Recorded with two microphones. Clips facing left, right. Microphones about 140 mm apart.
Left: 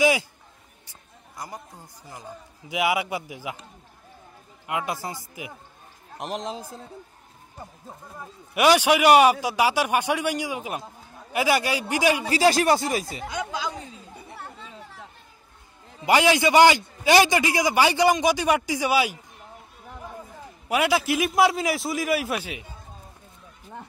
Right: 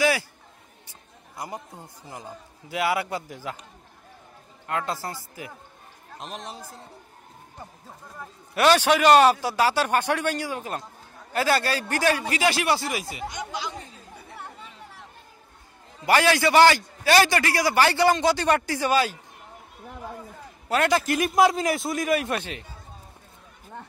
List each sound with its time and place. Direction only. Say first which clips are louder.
0.0 s a sound: left 2 dB; 20° left (ahead or behind)
1.3 s speech: right 2 dB; 25° right (ahead or behind)
2.7 s a man's voice: left 1 dB; 15° left (ahead or behind)
4.6 s a man's voice: even; 15° left (ahead or behind)
6.1 s a man's voice: left 6 dB; 80° left
8.2 s a man's voice: even; 15° left (ahead or behind)
12.3 s speech: left 4 dB; 35° left (ahead or behind)
16.0 s a man's voice: left 1 dB; 15° left (ahead or behind)
20.6 s a man's voice: even; 10° left (ahead or behind)